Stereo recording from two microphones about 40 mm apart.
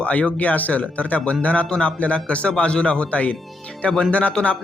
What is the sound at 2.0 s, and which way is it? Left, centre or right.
Speech, left.